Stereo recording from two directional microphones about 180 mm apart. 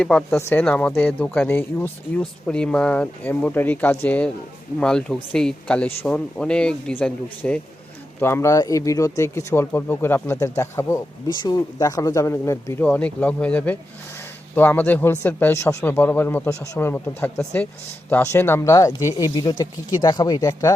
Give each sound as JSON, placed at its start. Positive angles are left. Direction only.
{"t": 0.0, "sound": "speech", "side_deg": 5}